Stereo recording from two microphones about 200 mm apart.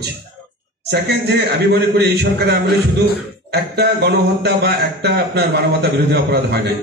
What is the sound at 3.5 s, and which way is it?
A man's voice, 55° right (ahead or behind).